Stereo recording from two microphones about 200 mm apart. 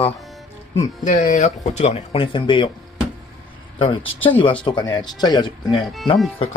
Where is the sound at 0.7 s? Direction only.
35° left (ahead or behind).